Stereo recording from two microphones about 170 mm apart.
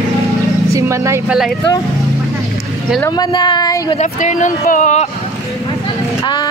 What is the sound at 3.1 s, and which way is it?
Speech, 25° left (ahead or behind).